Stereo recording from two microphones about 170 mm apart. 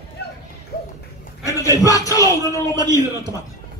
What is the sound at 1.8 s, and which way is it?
Music, 20° left (ahead or behind).